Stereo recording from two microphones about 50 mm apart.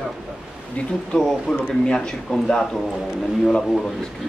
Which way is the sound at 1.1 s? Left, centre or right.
Centre.